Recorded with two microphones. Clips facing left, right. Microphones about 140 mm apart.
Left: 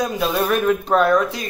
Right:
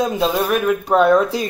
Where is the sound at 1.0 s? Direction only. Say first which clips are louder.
Right 7 dB; 25° right (ahead or behind).